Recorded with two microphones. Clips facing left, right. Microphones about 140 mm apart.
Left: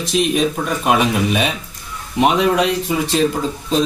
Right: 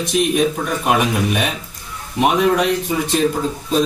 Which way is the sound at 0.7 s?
Centre (ahead or behind).